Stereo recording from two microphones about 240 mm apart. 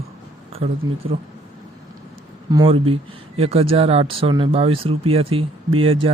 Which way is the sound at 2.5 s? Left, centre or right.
Centre.